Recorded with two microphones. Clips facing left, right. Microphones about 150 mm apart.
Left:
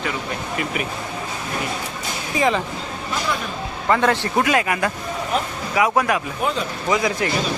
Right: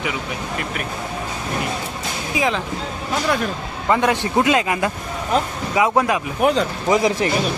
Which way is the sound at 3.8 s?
15° right (ahead or behind).